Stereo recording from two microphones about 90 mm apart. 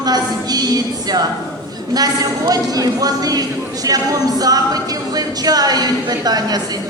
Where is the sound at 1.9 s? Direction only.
45° right (ahead or behind).